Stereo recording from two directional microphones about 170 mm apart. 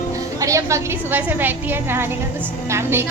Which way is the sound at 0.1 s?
20° right (ahead or behind).